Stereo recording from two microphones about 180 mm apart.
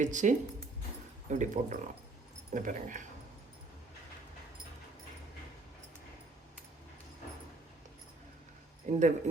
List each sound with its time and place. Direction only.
0.0 s speech: 45° right (ahead or behind)
8.9 s speech: 40° right (ahead or behind)